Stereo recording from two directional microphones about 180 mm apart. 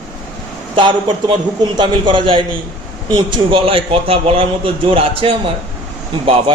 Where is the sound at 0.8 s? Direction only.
25° right (ahead or behind).